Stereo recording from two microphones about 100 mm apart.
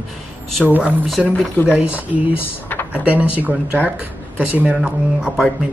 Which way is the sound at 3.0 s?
15° right (ahead or behind).